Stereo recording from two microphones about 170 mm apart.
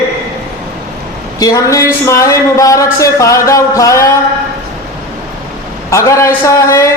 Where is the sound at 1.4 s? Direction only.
20° left (ahead or behind).